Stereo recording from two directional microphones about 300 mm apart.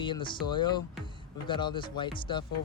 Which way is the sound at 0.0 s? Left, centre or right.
Centre.